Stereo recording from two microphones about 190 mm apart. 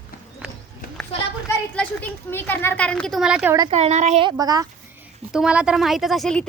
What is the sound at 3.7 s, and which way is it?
Speech, 35° right (ahead or behind).